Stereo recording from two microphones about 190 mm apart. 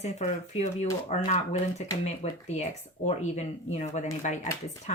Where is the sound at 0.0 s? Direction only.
35° left (ahead or behind).